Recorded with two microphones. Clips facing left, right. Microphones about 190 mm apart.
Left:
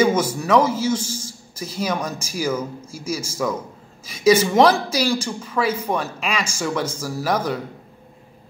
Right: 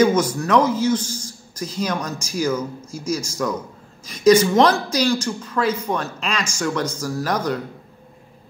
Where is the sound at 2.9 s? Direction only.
5° left (ahead or behind).